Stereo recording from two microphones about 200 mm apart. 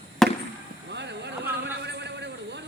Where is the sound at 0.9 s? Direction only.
60° right (ahead or behind).